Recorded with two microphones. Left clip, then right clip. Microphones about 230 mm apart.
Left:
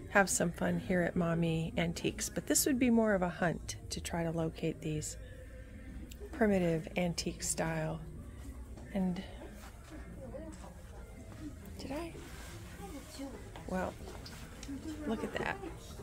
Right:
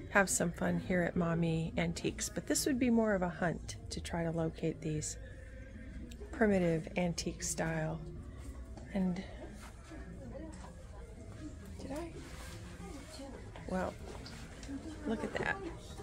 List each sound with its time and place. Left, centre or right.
0.1 s a woman's voice: centre
6.3 s a woman's voice: centre
11.8 s a sound: left
13.7 s speech: centre
15.0 s a woman's voice: centre